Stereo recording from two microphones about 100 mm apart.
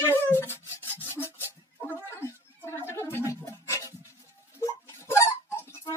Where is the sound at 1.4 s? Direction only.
20° right (ahead or behind).